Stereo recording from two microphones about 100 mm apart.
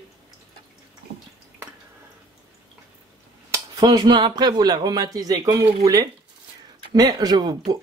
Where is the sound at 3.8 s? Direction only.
45° right (ahead or behind).